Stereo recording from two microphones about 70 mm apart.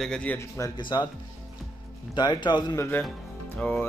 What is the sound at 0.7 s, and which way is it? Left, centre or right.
Speech, left.